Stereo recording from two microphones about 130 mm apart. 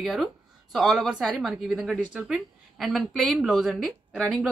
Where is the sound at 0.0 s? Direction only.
Centre (ahead or behind).